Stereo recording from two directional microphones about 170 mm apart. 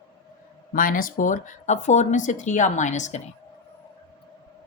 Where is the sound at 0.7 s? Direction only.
55° left (ahead or behind).